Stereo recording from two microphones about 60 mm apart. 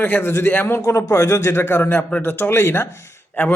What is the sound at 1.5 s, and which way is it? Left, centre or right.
A man's voice, left.